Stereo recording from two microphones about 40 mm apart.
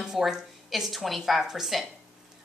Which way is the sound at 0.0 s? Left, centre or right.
Centre.